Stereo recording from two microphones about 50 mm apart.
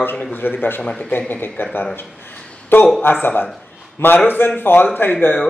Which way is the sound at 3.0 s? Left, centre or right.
Left.